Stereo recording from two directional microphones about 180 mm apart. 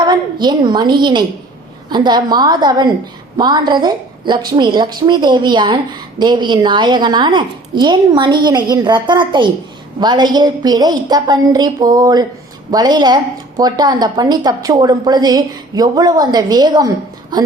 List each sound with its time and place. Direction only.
0.0 s a woman's voice: 25° right (ahead or behind)